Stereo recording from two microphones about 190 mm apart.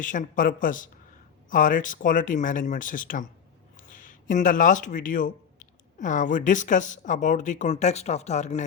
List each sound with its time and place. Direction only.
0.0 s speech: 45° left (ahead or behind)